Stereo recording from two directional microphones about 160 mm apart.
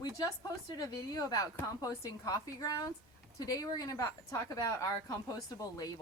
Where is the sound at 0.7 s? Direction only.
25° left (ahead or behind).